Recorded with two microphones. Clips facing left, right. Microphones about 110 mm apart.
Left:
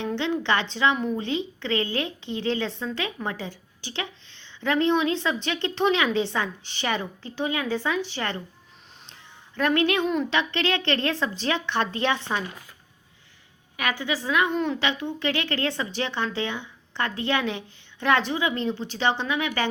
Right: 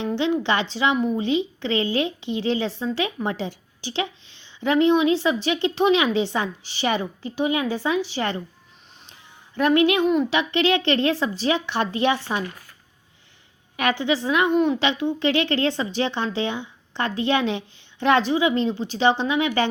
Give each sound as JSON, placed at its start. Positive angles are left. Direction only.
{"t": 0.0, "sound": "a woman's voice", "side_deg": -15}
{"t": 9.6, "sound": "a woman's voice", "side_deg": -15}
{"t": 13.7, "sound": "a woman's voice", "side_deg": -25}